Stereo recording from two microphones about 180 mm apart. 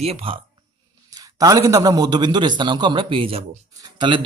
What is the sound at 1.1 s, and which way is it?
Speech, 20° right (ahead or behind).